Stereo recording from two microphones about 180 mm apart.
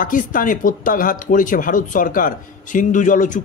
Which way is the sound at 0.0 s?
50° left (ahead or behind).